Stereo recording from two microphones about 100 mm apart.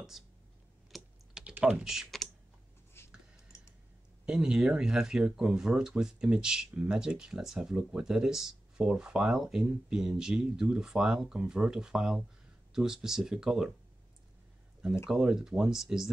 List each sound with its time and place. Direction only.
0.2 s speech: 5° right (ahead or behind)
0.9 s typing: 10° right (ahead or behind)
3.0 s a sound: 25° left (ahead or behind)
4.3 s speech: 5° right (ahead or behind)
15.0 s speech: 5° right (ahead or behind)